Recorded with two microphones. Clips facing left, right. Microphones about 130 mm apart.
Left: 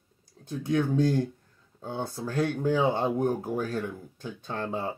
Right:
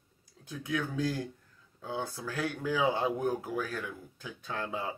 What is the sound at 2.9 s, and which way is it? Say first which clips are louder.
Speech: left 4 dB; 30° left (ahead or behind).